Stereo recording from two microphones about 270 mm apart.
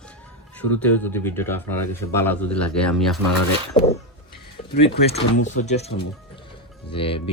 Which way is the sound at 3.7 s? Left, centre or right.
Left.